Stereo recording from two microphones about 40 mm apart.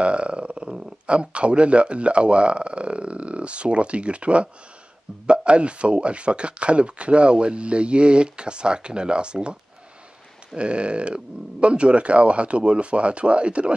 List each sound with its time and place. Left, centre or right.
0.0 s burping: right
1.0 s speech: right